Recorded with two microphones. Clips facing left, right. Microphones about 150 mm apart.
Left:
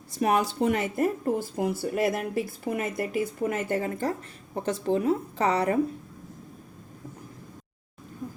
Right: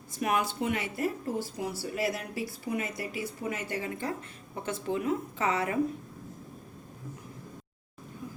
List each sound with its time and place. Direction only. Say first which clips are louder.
0.2 s speech: left 5 dB; 35° left (ahead or behind)
4.5 s a woman's voice: left 6 dB; 35° left (ahead or behind)